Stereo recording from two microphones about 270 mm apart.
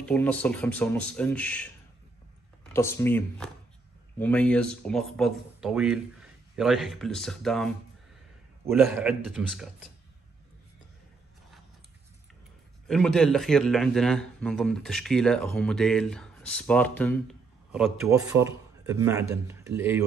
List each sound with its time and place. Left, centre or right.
0.0 s a man's voice: centre
2.7 s a man's voice: centre
12.8 s a man's voice: centre
18.0 s a man's voice: centre